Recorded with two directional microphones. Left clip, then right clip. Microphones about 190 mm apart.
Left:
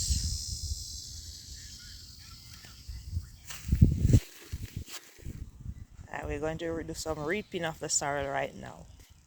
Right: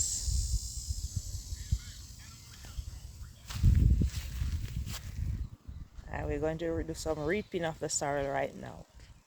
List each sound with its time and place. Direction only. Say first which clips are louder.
0.1 s snake: left 2 dB; 15° right (ahead or behind)
3.4 s a sound: left 4 dB; 45° left (ahead or behind)
6.1 s speech: even; centre (ahead or behind)